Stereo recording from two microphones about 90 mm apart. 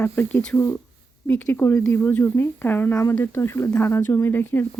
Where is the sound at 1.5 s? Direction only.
25° left (ahead or behind).